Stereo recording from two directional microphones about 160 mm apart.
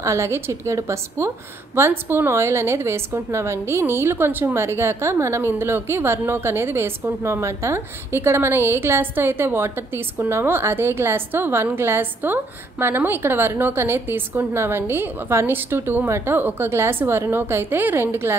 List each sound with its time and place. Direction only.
0.0 s a woman's voice: 15° right (ahead or behind)